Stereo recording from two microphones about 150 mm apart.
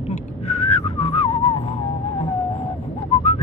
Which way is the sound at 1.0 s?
40° left (ahead or behind).